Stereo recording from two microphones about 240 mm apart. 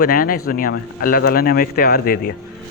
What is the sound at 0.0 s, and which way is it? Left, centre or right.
Speech, left.